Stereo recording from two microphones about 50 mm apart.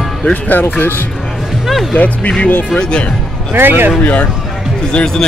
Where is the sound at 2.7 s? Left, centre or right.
Left.